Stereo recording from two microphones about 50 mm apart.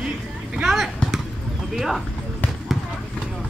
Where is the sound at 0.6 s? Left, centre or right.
Centre.